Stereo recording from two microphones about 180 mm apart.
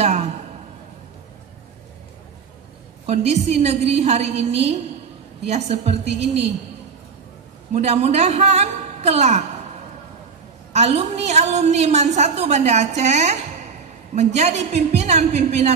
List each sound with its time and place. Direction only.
0.0 s a sound: 40° right (ahead or behind)
3.1 s a woman's voice: 35° right (ahead or behind)
7.7 s a woman's voice: 35° right (ahead or behind)
10.7 s a woman's voice: 35° right (ahead or behind)